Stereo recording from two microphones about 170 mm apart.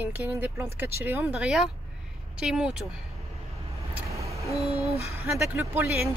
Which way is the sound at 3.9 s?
20° right (ahead or behind).